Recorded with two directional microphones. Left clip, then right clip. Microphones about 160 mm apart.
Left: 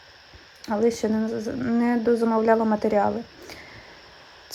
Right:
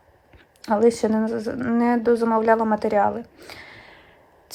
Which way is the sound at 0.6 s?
20° right (ahead or behind).